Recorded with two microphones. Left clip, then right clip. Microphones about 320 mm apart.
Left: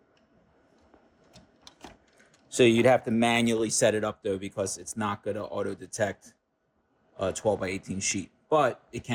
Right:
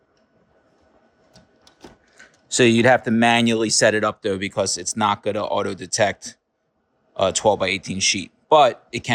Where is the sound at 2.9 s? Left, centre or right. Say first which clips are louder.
Right 7 dB; right.